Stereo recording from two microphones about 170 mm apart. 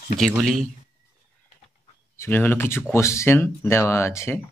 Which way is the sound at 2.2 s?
10° left (ahead or behind).